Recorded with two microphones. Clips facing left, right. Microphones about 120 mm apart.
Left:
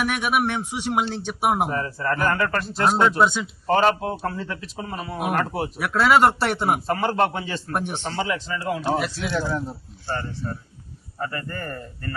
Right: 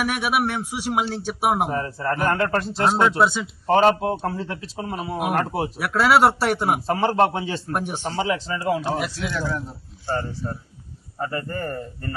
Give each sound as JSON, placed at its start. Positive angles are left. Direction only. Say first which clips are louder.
{"t": 0.0, "sound": "a man's voice", "louder": "even", "side_deg": -5}
{"t": 1.7, "sound": "a man's voice", "louder": "right 1 dB", "side_deg": -25}
{"t": 2.9, "sound": "a man's voice", "louder": "even", "side_deg": 0}
{"t": 3.8, "sound": "a man's voice", "louder": "right 3 dB", "side_deg": -25}
{"t": 5.8, "sound": "a man's voice", "louder": "even", "side_deg": -5}
{"t": 6.8, "sound": "a man's voice", "louder": "right 2 dB", "side_deg": -30}
{"t": 7.7, "sound": "a man's voice", "louder": "left 1 dB", "side_deg": -5}
{"t": 8.1, "sound": "a man's voice", "louder": "right 3 dB", "side_deg": -25}
{"t": 8.8, "sound": "a man's voice", "louder": "left 2 dB", "side_deg": -5}
{"t": 10.2, "sound": "a man's voice", "louder": "right 2 dB", "side_deg": -30}